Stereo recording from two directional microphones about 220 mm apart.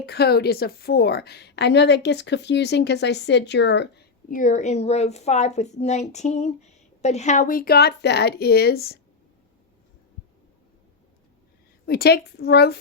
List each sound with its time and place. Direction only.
0.0 s a woman's voice: 45° left (ahead or behind)
11.9 s a woman's voice: 45° left (ahead or behind)